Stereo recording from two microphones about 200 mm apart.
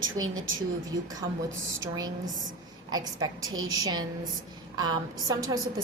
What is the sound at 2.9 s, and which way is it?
Speech, 20° right (ahead or behind).